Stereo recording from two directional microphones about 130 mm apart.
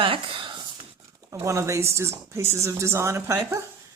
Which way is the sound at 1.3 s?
25° right (ahead or behind).